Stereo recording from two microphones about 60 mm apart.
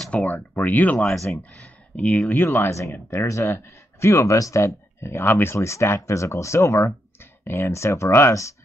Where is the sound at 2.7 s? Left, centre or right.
Left.